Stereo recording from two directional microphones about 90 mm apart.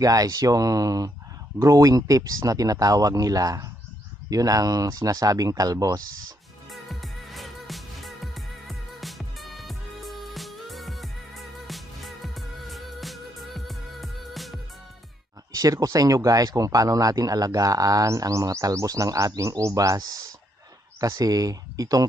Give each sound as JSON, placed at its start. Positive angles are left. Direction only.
{"t": 0.0, "sound": "speech", "side_deg": -40}
{"t": 6.7, "sound": "music", "side_deg": 0}
{"t": 15.5, "sound": "speech", "side_deg": -40}